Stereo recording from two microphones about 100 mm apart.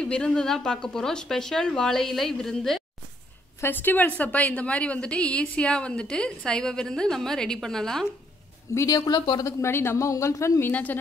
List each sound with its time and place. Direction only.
0.0 s speech: 10° left (ahead or behind)
3.6 s a woman's voice: 20° left (ahead or behind)
8.7 s speech: 40° left (ahead or behind)
9.4 s speech: 30° left (ahead or behind)
10.7 s a woman's voice: 15° left (ahead or behind)